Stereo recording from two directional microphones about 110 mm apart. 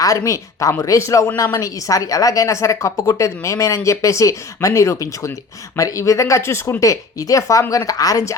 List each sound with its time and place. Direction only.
0.0 s a woman's voice: 30° left (ahead or behind)